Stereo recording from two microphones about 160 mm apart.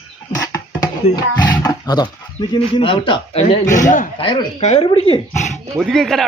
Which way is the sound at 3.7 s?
50° left (ahead or behind).